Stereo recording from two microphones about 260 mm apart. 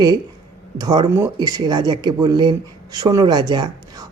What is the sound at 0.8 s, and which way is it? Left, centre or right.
Speech, centre.